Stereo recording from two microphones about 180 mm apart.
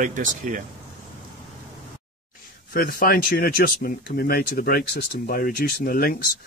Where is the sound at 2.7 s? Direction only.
55° left (ahead or behind).